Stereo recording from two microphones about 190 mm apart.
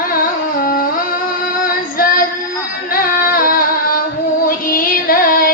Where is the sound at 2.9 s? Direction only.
50° left (ahead or behind).